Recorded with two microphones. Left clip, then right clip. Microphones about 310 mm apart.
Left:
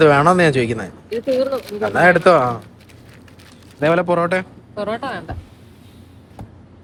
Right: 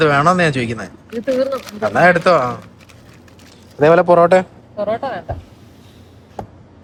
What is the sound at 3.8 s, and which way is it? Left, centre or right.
Speech, centre.